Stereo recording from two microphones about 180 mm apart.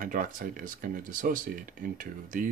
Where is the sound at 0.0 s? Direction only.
45° right (ahead or behind).